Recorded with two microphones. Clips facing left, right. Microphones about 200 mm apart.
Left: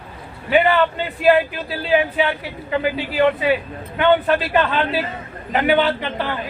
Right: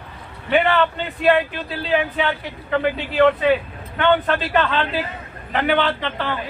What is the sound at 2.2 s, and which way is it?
Speech, 5° left (ahead or behind).